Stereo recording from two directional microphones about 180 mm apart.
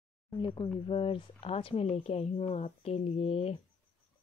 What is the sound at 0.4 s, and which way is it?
Speech, 25° left (ahead or behind).